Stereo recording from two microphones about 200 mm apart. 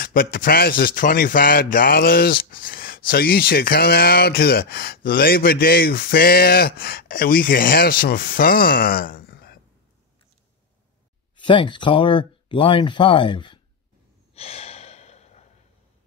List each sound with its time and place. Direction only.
0.0 s speech: 45° left (ahead or behind)
11.3 s speech: 25° left (ahead or behind)
14.3 s gasp: 30° left (ahead or behind)